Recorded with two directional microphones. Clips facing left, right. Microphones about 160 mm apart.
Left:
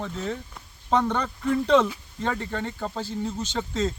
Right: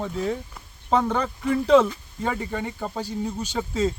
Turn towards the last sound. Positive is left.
turn(degrees=-10)  # may be behind; listen again after turning